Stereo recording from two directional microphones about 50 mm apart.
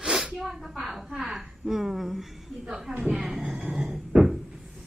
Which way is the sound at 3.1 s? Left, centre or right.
Centre.